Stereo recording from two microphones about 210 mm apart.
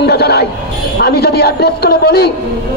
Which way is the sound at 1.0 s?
50° left (ahead or behind).